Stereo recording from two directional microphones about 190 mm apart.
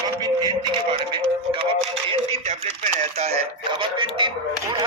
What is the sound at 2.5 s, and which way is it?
Speech, 35° right (ahead or behind).